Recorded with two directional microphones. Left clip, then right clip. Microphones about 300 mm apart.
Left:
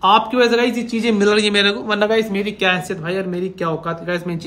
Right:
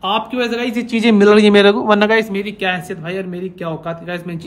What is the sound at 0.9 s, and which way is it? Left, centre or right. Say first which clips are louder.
Speech: right 6 dB; right.